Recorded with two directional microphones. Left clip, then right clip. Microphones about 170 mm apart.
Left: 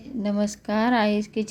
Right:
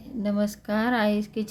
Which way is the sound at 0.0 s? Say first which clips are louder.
Left 1 dB; 10° left (ahead or behind).